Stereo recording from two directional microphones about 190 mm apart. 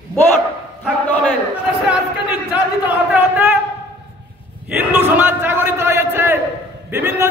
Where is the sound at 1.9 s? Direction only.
5° right (ahead or behind).